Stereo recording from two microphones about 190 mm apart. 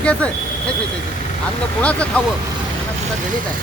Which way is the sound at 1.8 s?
5° left (ahead or behind).